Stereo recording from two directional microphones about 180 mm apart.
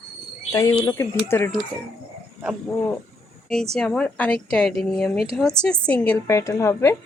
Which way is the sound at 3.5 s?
5° left (ahead or behind).